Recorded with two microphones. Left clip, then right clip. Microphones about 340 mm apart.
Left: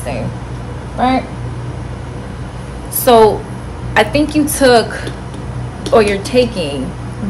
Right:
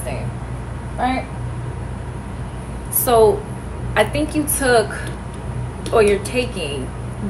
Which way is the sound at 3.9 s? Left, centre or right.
Left.